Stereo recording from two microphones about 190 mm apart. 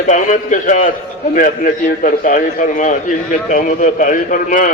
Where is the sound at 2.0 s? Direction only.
45° left (ahead or behind).